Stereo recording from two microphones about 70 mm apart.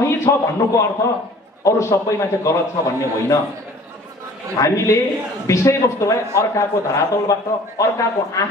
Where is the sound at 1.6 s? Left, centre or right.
Left.